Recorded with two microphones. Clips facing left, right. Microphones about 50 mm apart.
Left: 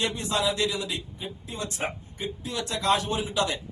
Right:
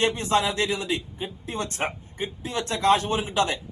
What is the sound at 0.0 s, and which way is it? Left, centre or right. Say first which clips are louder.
Speech: right 4 dB; right.